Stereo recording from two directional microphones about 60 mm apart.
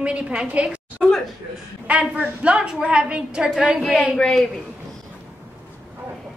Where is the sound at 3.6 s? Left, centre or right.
Centre.